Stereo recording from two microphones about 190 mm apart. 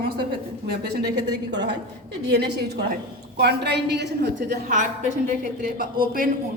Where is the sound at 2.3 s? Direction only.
60° right (ahead or behind).